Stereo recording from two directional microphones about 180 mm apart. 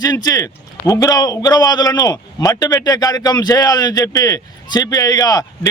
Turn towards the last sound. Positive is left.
turn(degrees=20)  # may be behind; listen again after turning